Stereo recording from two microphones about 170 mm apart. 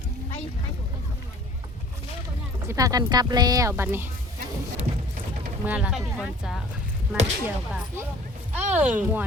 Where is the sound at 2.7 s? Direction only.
20° right (ahead or behind).